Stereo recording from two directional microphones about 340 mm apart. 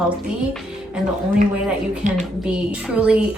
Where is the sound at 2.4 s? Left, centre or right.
Centre.